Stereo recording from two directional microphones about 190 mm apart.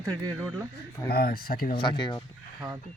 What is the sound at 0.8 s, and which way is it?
Speech, 55° left (ahead or behind).